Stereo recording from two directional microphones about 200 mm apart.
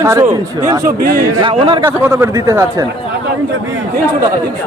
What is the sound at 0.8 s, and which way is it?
Speech, 45° right (ahead or behind).